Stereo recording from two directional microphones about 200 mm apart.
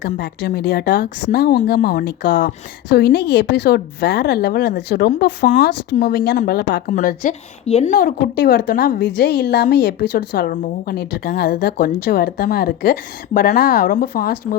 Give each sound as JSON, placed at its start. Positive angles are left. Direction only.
{"t": 0.2, "sound": "a woman's voice", "side_deg": 60}
{"t": 6.9, "sound": "a woman's voice", "side_deg": 40}
{"t": 9.1, "sound": "a woman's voice", "side_deg": 55}
{"t": 10.5, "sound": "a woman's voice", "side_deg": 45}